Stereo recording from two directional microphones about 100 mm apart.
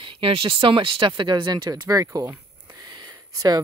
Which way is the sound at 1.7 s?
35° right (ahead or behind).